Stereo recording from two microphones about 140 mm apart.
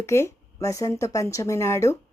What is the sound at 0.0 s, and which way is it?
Speech, 20° left (ahead or behind).